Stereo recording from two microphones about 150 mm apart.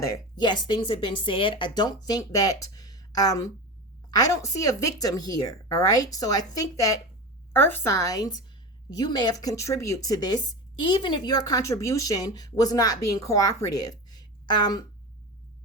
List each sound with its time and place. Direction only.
0.0 s speech: 25° left (ahead or behind)